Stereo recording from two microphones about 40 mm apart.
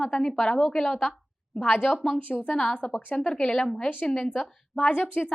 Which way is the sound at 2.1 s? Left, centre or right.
Left.